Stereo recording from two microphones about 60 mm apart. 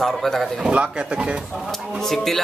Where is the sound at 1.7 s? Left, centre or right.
Centre.